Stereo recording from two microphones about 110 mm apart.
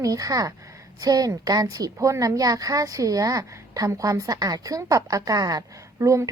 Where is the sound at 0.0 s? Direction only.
35° right (ahead or behind).